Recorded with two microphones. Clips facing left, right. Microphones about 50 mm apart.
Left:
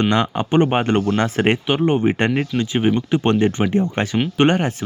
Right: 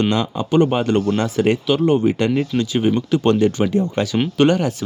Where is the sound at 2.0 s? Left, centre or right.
Left.